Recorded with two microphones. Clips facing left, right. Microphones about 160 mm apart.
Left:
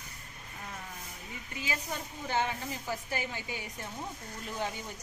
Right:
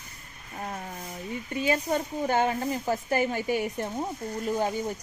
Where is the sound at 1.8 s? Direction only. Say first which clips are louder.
Right 11 dB; 50° right (ahead or behind).